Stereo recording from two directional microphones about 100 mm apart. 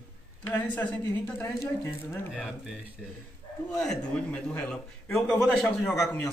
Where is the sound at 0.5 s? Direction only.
15° left (ahead or behind).